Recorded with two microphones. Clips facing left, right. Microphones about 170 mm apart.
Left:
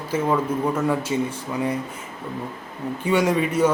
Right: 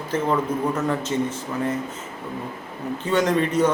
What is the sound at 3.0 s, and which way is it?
Speech, 10° left (ahead or behind).